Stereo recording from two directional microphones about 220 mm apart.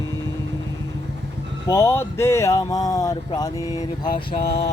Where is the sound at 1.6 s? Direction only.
10° left (ahead or behind).